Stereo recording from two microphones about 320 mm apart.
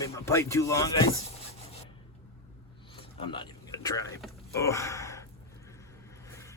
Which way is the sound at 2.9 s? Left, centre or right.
Centre.